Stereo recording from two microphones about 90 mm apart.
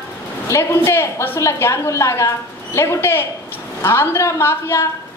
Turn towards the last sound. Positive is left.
turn(degrees=25)  # may be behind; listen again after turning